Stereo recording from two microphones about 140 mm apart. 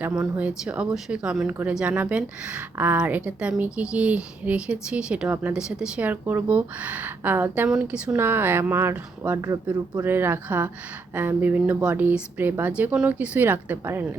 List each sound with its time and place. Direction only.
0.1 s speech: 5° right (ahead or behind)